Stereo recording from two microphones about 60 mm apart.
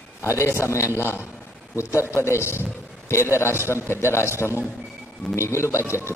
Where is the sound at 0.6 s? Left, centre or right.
Left.